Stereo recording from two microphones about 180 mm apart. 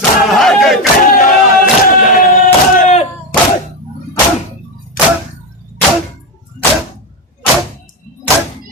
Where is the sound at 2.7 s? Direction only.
40° left (ahead or behind).